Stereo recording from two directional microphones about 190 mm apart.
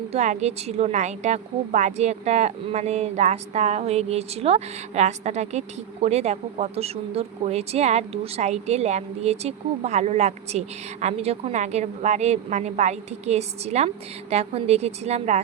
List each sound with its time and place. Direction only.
0.1 s a woman's voice: 35° right (ahead or behind)